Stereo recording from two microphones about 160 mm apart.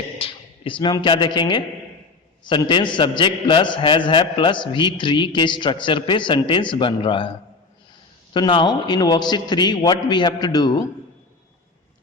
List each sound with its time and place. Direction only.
0.2 s a man's voice: 35° left (ahead or behind)
8.3 s a man's voice: 30° left (ahead or behind)